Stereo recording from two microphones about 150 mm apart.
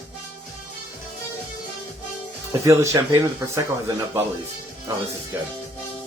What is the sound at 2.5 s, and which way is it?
Speech, 20° right (ahead or behind).